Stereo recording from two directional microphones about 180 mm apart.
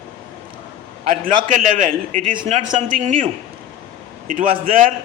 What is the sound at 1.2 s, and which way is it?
Speech, 50° right (ahead or behind).